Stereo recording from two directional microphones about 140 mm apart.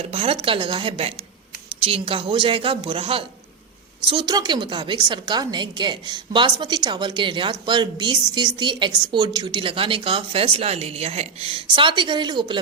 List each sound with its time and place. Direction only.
0.1 s a woman's voice: 40° right (ahead or behind)